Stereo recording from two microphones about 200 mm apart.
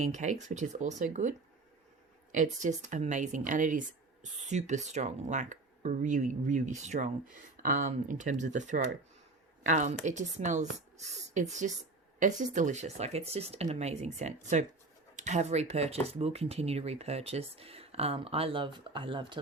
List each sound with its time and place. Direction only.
0.0 s speech: 35° right (ahead or behind)